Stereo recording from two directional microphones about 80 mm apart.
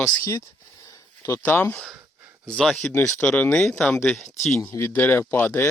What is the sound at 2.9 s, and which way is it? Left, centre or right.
Speech, left.